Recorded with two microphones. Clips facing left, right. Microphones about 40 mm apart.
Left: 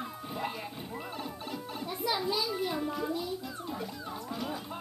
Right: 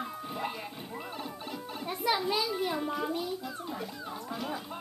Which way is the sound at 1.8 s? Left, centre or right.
Right.